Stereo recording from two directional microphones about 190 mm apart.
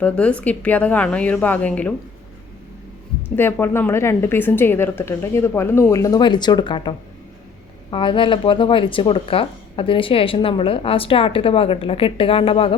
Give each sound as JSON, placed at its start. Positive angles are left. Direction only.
{"t": 0.0, "sound": "a woman's voice", "side_deg": 5}
{"t": 3.3, "sound": "a woman's voice", "side_deg": 10}